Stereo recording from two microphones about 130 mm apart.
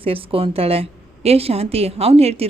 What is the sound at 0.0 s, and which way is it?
A woman's voice, 45° right (ahead or behind).